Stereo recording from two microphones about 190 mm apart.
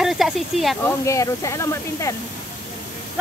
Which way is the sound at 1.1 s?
15° left (ahead or behind).